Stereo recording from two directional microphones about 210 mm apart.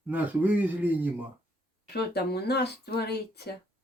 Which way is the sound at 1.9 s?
50° left (ahead or behind).